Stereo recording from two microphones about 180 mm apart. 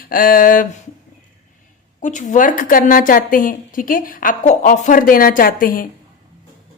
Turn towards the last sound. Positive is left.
turn(degrees=50)  # may be behind; listen again after turning